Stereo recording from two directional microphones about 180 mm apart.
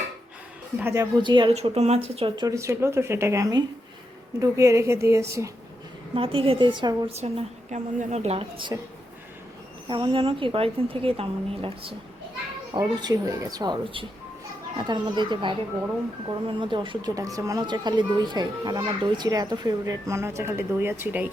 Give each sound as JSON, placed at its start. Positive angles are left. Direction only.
{"t": 0.8, "sound": "a woman's voice", "side_deg": -10}
{"t": 1.2, "sound": "a woman's voice", "side_deg": -25}
{"t": 6.1, "sound": "speech", "side_deg": -30}
{"t": 7.2, "sound": "a woman's voice", "side_deg": -40}
{"t": 9.9, "sound": "speech", "side_deg": -30}
{"t": 16.6, "sound": "speech", "side_deg": -25}